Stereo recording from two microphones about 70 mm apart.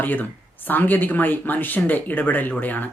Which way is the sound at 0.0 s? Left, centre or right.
Left.